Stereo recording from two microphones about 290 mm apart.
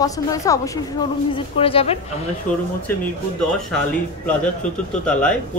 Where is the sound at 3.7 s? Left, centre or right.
Centre.